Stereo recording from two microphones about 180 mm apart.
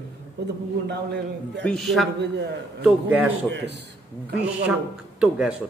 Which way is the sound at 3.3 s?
75° right (ahead or behind).